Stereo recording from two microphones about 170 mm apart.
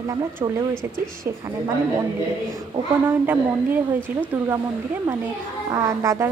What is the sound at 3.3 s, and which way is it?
Speech, 10° right (ahead or behind).